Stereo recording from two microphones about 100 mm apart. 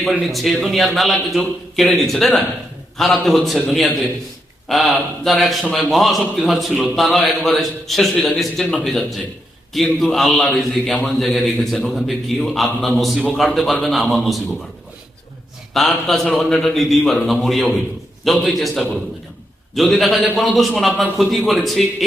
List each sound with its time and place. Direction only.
0.0 s a man's voice: centre (ahead or behind)
15.7 s a man's voice: centre (ahead or behind)